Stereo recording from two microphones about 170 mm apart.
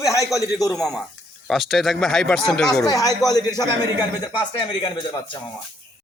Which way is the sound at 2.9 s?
20° left (ahead or behind).